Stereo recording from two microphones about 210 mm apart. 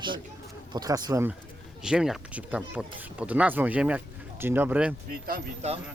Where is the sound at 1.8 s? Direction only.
5° right (ahead or behind).